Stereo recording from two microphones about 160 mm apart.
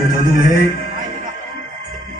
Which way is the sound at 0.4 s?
55° right (ahead or behind).